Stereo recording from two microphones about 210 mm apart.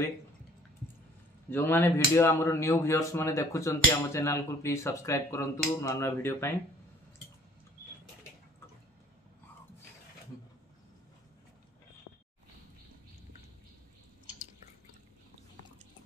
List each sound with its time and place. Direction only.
1.5 s speech: 10° left (ahead or behind)